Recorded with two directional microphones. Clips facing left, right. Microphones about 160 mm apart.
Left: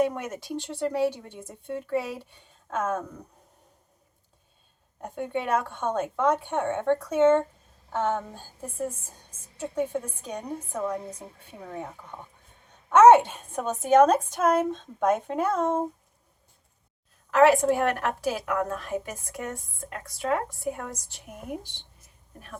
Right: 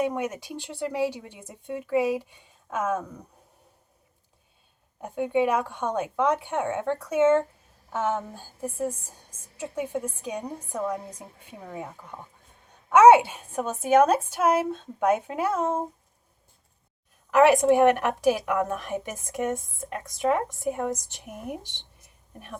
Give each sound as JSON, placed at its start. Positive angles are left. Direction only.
{"t": 0.0, "sound": "speech", "side_deg": -10}
{"t": 4.9, "sound": "speech", "side_deg": -10}
{"t": 9.6, "sound": "speech", "side_deg": -10}
{"t": 17.3, "sound": "a woman's voice", "side_deg": -15}